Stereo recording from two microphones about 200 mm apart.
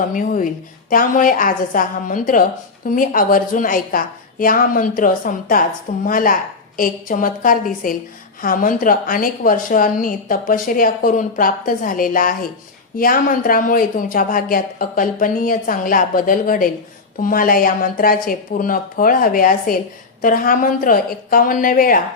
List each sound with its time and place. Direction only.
0.1 s a woman's voice: 40° left (ahead or behind)